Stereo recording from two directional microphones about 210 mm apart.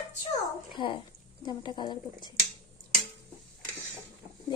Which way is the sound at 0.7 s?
25° left (ahead or behind).